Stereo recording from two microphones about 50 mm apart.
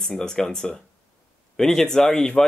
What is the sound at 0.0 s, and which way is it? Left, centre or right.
Speech, centre.